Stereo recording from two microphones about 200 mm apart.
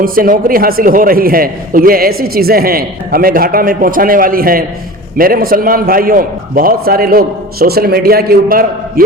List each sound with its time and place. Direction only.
0.0 s a man's voice: 45° right (ahead or behind)